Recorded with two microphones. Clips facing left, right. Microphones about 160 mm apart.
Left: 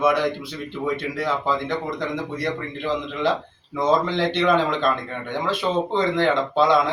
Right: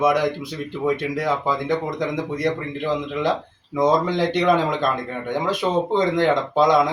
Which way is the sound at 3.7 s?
15° right (ahead or behind).